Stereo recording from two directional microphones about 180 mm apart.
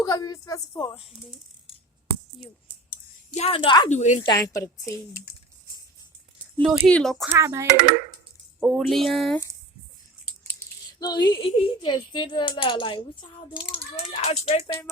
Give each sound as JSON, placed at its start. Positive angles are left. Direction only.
{"t": 0.0, "sound": "a child's voice", "side_deg": 20}
{"t": 3.3, "sound": "a child's voice", "side_deg": 30}
{"t": 3.8, "sound": "speech", "side_deg": 40}
{"t": 4.3, "sound": "a woman's voice", "side_deg": 20}
{"t": 6.8, "sound": "speech", "side_deg": 5}
{"t": 7.3, "sound": "speech", "side_deg": -15}
{"t": 8.6, "sound": "speech", "side_deg": 0}
{"t": 11.0, "sound": "a child's voice", "side_deg": 25}